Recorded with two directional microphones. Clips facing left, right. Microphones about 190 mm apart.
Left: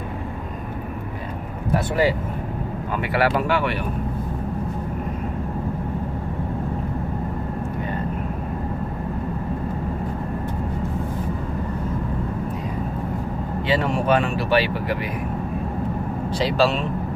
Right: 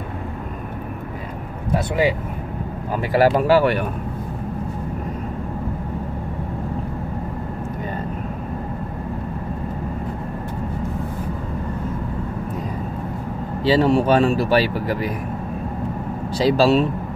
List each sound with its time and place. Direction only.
3.0 s speech: 40° right (ahead or behind)
13.7 s speech: 35° right (ahead or behind)
16.3 s speech: 40° right (ahead or behind)